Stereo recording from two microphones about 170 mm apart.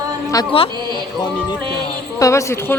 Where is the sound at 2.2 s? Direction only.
15° left (ahead or behind).